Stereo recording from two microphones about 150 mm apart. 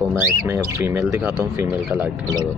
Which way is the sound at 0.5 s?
15° right (ahead or behind).